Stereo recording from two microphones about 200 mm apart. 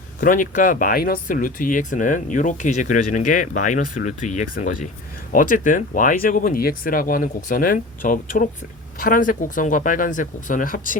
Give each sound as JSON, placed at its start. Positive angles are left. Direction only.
{"t": 0.2, "sound": "speech", "side_deg": 40}